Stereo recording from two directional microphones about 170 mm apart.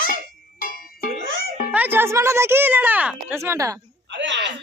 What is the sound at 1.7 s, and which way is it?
Speech, 10° right (ahead or behind).